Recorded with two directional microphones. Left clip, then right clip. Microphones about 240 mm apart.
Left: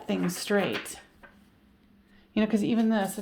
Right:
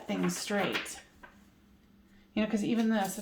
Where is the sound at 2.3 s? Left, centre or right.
Left.